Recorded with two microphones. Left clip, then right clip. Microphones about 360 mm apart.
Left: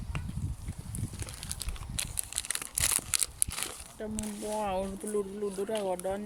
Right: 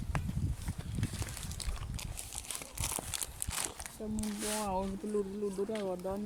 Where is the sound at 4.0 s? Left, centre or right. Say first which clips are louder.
Left 2 dB; left.